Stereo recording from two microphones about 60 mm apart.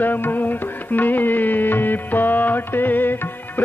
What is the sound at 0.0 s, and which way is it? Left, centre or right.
Music, left.